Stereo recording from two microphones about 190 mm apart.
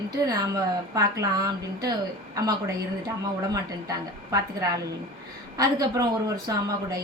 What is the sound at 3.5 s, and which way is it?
Speech, 20° right (ahead or behind).